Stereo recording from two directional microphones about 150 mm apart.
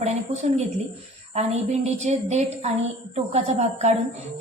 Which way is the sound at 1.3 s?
45° right (ahead or behind).